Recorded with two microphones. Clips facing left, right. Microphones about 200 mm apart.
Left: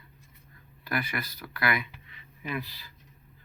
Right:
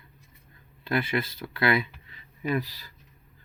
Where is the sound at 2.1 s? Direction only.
40° right (ahead or behind).